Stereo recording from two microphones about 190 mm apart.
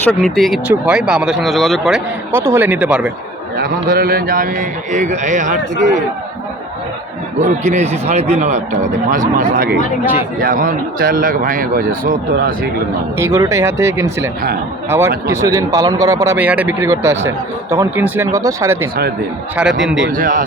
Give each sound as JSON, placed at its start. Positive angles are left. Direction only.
{"t": 0.0, "sound": "speech", "side_deg": 5}
{"t": 2.3, "sound": "speech", "side_deg": -15}
{"t": 3.6, "sound": "speech", "side_deg": -50}
{"t": 7.3, "sound": "a man's voice", "side_deg": -40}
{"t": 13.1, "sound": "speech", "side_deg": -15}
{"t": 20.1, "sound": "speech", "side_deg": -45}